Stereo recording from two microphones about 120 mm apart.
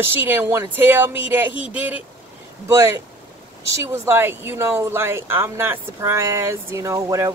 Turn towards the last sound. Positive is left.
turn(degrees=-25)  # may be behind; listen again after turning